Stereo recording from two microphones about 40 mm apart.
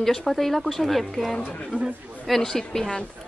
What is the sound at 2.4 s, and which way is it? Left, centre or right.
Speech, centre.